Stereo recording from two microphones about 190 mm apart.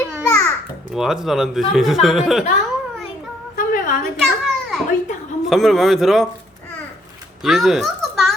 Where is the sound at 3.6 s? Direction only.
45° left (ahead or behind).